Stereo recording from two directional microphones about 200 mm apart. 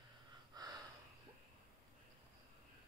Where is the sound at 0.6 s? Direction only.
20° right (ahead or behind).